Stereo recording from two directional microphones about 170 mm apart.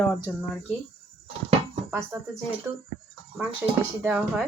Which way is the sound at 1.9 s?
Centre (ahead or behind).